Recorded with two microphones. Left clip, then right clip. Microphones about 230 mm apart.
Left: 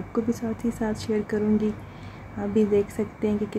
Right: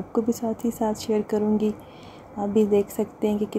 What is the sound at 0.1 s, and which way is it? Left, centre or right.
Speech, centre.